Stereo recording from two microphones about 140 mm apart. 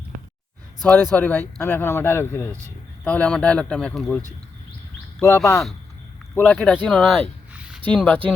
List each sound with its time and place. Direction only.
1.1 s a man's voice: 15° left (ahead or behind)
5.2 s speech: 20° left (ahead or behind)
6.4 s a man's voice: 10° left (ahead or behind)